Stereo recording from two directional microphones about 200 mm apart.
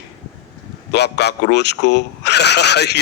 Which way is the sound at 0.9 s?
55° left (ahead or behind).